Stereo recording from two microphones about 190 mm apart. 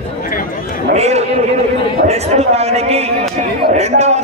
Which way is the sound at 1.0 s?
35° right (ahead or behind).